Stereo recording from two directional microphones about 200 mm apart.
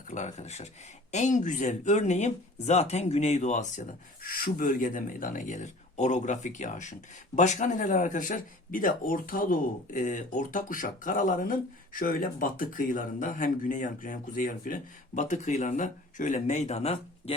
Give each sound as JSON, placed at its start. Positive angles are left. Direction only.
{"t": 0.1, "sound": "speech", "side_deg": 35}